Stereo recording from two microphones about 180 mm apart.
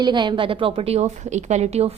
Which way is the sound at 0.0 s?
25° right (ahead or behind).